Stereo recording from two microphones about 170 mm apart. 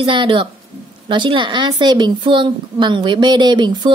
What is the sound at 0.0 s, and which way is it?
A woman's voice, 30° right (ahead or behind).